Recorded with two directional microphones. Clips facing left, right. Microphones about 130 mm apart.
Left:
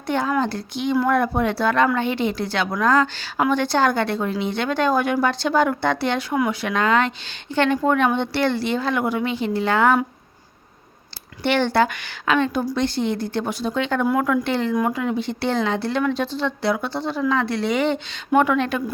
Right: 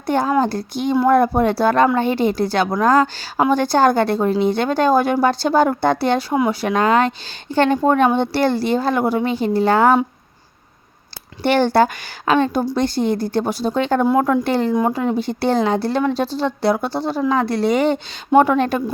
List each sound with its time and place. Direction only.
0.1 s a woman's voice: 35° right (ahead or behind)
11.4 s a woman's voice: 40° right (ahead or behind)